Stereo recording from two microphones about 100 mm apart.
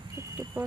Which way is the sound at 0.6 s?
20° right (ahead or behind).